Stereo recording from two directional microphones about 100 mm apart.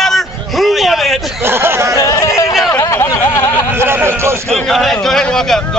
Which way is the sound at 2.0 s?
35° left (ahead or behind).